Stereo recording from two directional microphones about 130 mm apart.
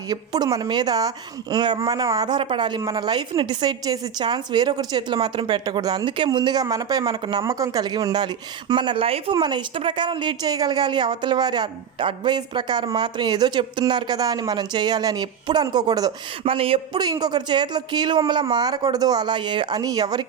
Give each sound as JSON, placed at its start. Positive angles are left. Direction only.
{"t": 0.1, "sound": "a woman's voice", "side_deg": -30}
{"t": 9.3, "sound": "a woman's voice", "side_deg": -35}
{"t": 16.4, "sound": "speech", "side_deg": -45}
{"t": 17.0, "sound": "a woman's voice", "side_deg": -30}